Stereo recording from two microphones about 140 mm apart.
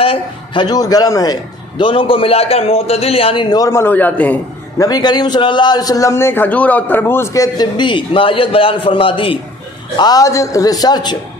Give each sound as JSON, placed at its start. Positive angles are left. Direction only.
{"t": 0.0, "sound": "a man's voice", "side_deg": 45}
{"t": 0.7, "sound": "a man's voice", "side_deg": 25}
{"t": 4.7, "sound": "a man's voice", "side_deg": 25}
{"t": 9.9, "sound": "a man's voice", "side_deg": 30}